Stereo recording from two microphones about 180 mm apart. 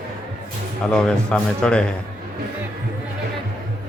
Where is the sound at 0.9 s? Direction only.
5° left (ahead or behind).